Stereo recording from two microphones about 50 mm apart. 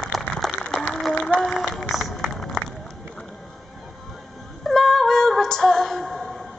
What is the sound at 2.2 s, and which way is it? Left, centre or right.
Run, centre.